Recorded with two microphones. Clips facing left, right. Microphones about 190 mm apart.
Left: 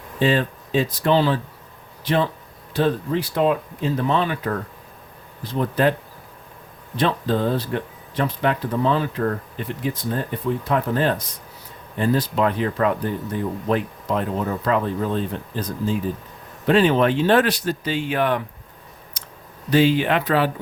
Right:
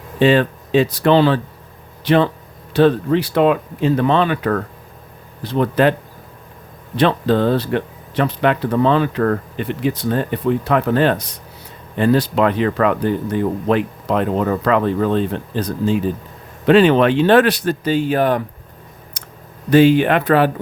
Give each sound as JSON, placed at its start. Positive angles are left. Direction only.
{"t": 0.2, "sound": "speech", "side_deg": -75}
{"t": 6.9, "sound": "speech", "side_deg": -70}
{"t": 17.8, "sound": "speech", "side_deg": -40}
{"t": 19.2, "sound": "a sound", "side_deg": -50}
{"t": 19.7, "sound": "speech", "side_deg": -55}